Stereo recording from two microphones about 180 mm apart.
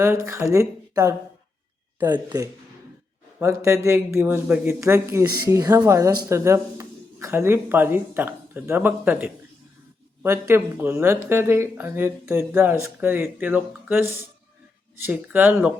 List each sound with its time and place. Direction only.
0.0 s speech: 15° right (ahead or behind)
3.4 s speech: 15° right (ahead or behind)